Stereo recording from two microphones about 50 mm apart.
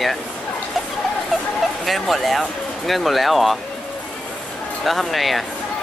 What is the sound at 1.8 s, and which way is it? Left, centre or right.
Speech, centre.